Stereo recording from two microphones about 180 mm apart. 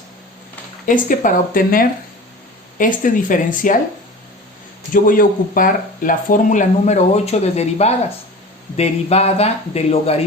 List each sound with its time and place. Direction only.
0.9 s speech: 45° left (ahead or behind)
5.0 s speech: 50° left (ahead or behind); by 10.2 s 35° left (ahead or behind)